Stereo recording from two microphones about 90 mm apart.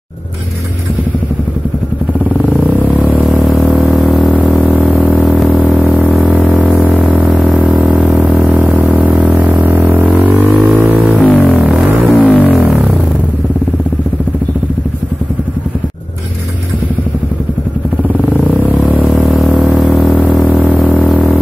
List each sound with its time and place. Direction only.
3.0 s vehicle: 20° left (ahead or behind)
3.3 s vehicle: centre (ahead or behind)
4.3 s vehicle: 20° left (ahead or behind)
8.5 s vehicle: 15° right (ahead or behind)
10.1 s a sound: 15° right (ahead or behind)
11.2 s music: 15° left (ahead or behind)
19.0 s vehicle: centre (ahead or behind)
20.1 s vehicle: 15° left (ahead or behind)